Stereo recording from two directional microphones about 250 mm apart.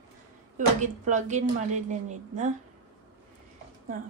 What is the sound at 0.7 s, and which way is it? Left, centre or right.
A woman's voice, right.